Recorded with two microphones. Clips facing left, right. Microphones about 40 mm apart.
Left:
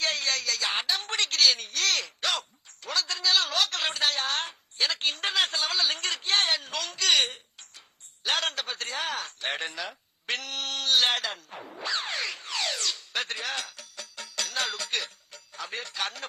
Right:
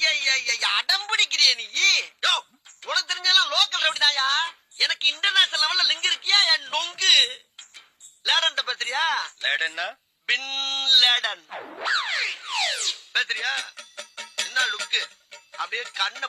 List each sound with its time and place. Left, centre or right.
0.0 s a woman's voice: right